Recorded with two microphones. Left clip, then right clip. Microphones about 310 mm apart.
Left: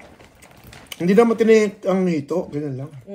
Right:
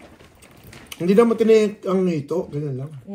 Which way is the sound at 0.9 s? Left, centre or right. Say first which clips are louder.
Left 1 dB; left.